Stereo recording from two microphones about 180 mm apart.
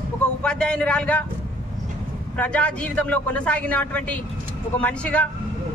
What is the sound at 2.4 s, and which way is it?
A man's voice, 5° left (ahead or behind).